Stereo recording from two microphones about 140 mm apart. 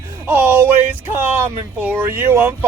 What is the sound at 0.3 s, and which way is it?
Speech, 15° right (ahead or behind).